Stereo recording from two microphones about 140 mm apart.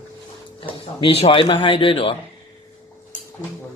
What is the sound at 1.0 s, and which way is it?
Speech, 40° left (ahead or behind).